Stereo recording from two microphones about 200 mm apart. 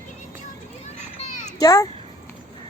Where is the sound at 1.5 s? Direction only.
15° left (ahead or behind).